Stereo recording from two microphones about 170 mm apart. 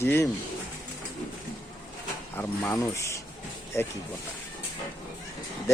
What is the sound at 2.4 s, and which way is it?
Speech, 20° left (ahead or behind).